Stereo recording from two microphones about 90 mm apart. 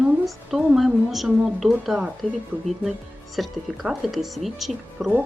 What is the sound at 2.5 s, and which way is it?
Speech, 20° left (ahead or behind).